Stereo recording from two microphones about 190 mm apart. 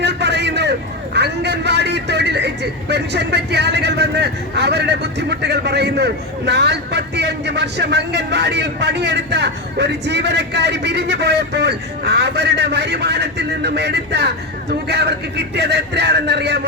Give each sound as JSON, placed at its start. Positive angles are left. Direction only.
{"t": 0.0, "sound": "vehicle", "side_deg": -65}
{"t": 2.9, "sound": "speech", "side_deg": -60}